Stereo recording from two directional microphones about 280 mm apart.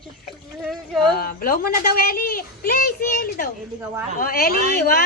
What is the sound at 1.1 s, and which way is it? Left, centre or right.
A child's voice, left.